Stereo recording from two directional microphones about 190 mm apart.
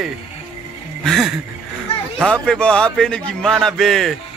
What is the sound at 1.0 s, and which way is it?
A man's voice, centre (ahead or behind).